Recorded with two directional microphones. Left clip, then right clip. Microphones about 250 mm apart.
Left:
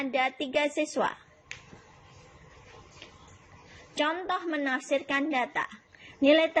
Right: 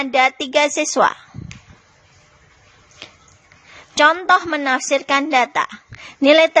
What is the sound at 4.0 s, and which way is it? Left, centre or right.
A woman's voice, right.